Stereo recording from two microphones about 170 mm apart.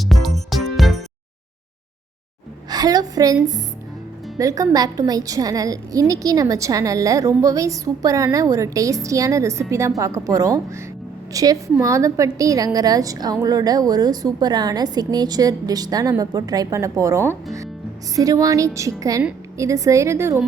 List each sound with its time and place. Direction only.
0.0 s music: centre (ahead or behind)
2.6 s a woman's voice: 25° right (ahead or behind)
4.4 s a woman's voice: 20° right (ahead or behind)